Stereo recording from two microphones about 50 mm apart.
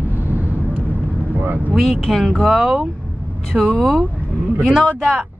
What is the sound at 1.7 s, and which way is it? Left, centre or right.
Speech, centre.